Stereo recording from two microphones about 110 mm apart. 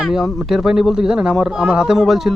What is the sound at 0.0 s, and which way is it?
Speech, 5° right (ahead or behind).